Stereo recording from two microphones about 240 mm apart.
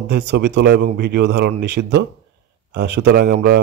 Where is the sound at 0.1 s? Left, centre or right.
Right.